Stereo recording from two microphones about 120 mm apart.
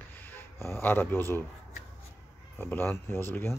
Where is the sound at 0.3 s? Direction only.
20° left (ahead or behind).